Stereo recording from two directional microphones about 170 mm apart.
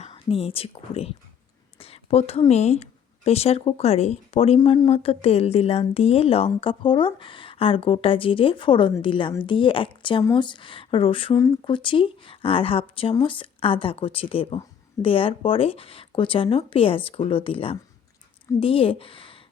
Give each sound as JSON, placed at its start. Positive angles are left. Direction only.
{"t": 0.0, "sound": "speech", "side_deg": 35}
{"t": 1.8, "sound": "whispering", "side_deg": 35}
{"t": 2.5, "sound": "speech", "side_deg": 40}